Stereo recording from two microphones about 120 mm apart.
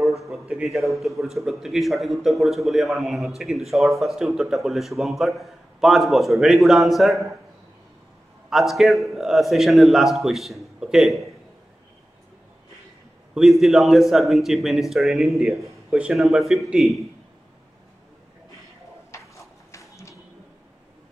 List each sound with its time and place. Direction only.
0.2 s a man's voice: 5° right (ahead or behind)
8.5 s a man's voice: centre (ahead or behind)
13.3 s a man's voice: 5° right (ahead or behind)
19.1 s a sound: 25° left (ahead or behind)